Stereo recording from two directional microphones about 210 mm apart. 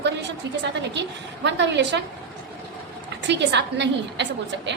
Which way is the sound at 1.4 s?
55° right (ahead or behind).